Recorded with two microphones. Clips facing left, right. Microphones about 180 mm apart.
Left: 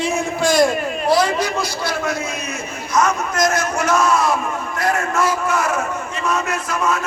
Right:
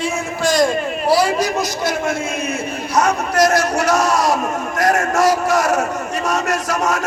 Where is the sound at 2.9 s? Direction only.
35° right (ahead or behind).